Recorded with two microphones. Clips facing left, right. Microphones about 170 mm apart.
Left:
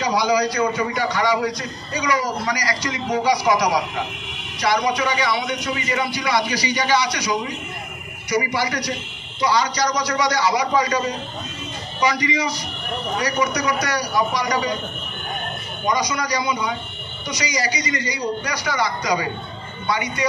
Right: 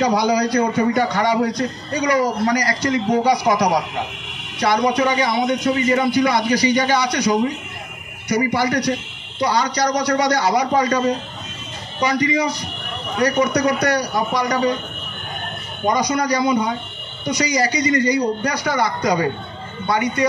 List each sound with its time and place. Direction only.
0.0 s a man's voice: 55° right (ahead or behind)
15.8 s a man's voice: 55° right (ahead or behind)